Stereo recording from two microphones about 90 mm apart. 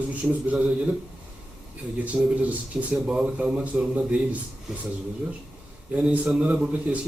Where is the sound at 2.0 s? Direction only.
15° right (ahead or behind).